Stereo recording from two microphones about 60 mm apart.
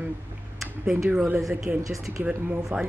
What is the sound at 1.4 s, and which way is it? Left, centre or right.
Speech, centre.